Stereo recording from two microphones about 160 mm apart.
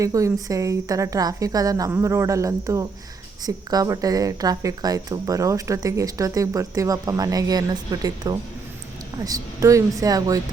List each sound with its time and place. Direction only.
0.0 s speech: 20° right (ahead or behind)